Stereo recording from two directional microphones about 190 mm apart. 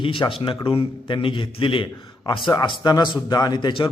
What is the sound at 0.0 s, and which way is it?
A man's voice, 25° left (ahead or behind).